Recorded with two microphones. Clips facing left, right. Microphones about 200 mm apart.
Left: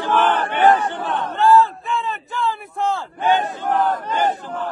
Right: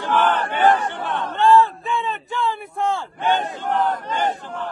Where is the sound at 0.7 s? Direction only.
25° left (ahead or behind).